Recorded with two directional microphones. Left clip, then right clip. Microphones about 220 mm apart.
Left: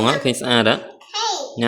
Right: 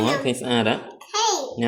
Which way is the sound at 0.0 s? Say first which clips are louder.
Left 4 dB; 30° left (ahead or behind).